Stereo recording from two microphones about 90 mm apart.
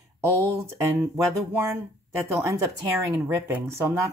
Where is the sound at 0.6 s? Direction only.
30° right (ahead or behind).